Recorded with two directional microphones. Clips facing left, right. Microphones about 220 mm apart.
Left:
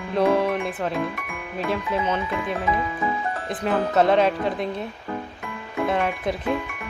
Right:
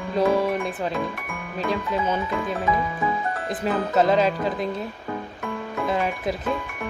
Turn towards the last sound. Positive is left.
turn(degrees=0)  # may be behind; listen again after turning